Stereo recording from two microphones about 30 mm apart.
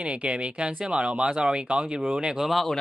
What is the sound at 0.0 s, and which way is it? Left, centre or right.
Speech, right.